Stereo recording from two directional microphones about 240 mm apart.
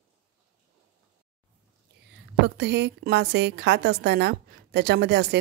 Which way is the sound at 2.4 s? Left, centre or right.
Right.